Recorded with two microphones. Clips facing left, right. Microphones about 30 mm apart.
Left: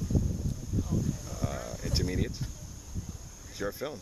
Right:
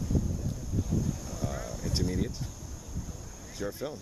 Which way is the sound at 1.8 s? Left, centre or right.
Centre.